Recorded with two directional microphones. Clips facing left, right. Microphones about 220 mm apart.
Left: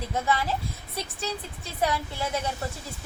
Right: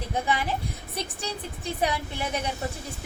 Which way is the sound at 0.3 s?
15° right (ahead or behind).